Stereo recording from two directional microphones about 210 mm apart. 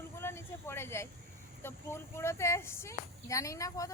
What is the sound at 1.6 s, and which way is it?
Speech, 10° left (ahead or behind).